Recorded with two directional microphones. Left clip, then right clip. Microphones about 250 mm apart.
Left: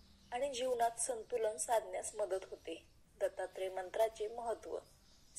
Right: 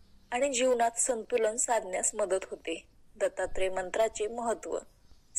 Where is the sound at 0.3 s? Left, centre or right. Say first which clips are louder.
Right 10 dB; right.